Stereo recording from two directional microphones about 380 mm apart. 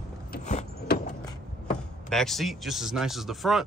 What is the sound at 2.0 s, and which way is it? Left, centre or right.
Speech, centre.